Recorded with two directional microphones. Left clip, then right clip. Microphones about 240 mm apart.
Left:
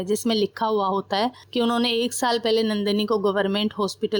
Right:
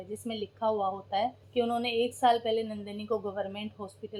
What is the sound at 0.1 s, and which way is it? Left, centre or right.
Speech, left.